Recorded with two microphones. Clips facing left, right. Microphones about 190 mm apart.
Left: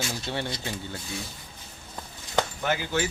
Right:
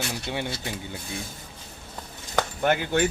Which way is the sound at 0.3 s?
15° right (ahead or behind).